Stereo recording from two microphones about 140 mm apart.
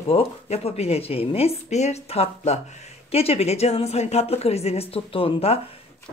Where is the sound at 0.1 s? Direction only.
45° left (ahead or behind).